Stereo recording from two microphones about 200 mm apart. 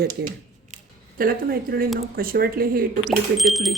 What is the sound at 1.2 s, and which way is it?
Speech, 45° right (ahead or behind).